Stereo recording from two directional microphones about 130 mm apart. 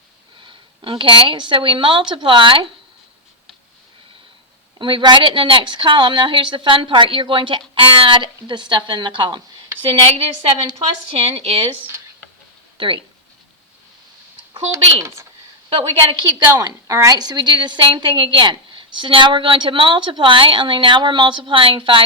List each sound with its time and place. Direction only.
0.8 s a woman's voice: 40° right (ahead or behind)
4.8 s a woman's voice: 40° right (ahead or behind)
9.9 s a woman's voice: 50° right (ahead or behind)
12.7 s speech: 40° right (ahead or behind)
14.5 s a woman's voice: 40° right (ahead or behind)
15.7 s a woman's voice: 50° right (ahead or behind)
16.2 s a woman's voice: 30° right (ahead or behind)